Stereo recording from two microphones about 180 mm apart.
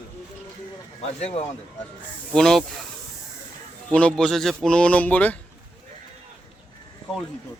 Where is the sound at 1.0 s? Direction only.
35° left (ahead or behind).